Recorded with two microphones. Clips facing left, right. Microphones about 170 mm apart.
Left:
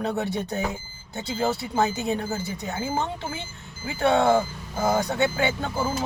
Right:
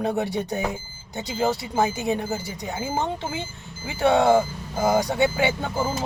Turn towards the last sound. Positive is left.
turn(degrees=-15)  # may be behind; listen again after turning